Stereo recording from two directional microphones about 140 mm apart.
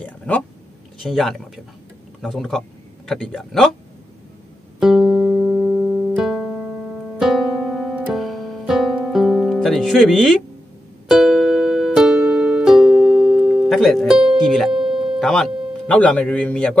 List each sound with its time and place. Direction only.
0.0 s a sound: 10° left (ahead or behind)
1.0 s speech: centre (ahead or behind)
4.7 s music: 5° right (ahead or behind)
15.1 s a man's voice: centre (ahead or behind)